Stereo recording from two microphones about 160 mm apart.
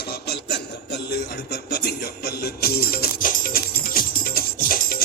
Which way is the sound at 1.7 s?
90° left.